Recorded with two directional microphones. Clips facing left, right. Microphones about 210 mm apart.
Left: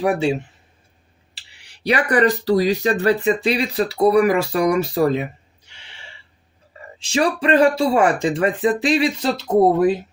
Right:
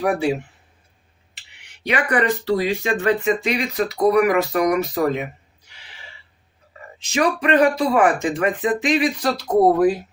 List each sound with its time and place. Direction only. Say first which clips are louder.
0.0 s speech: left 1 dB; 25° left (ahead or behind)
1.4 s speech: left 3 dB; 35° left (ahead or behind)
7.0 s speech: left 1 dB; 30° left (ahead or behind)